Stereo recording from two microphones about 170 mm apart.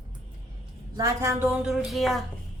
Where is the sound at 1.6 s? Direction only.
Centre (ahead or behind).